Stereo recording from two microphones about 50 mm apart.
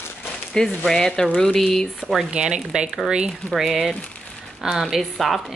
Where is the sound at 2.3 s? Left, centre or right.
Centre.